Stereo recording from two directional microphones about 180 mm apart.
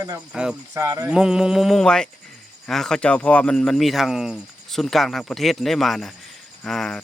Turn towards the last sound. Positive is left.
turn(degrees=0)  # may be behind; listen again after turning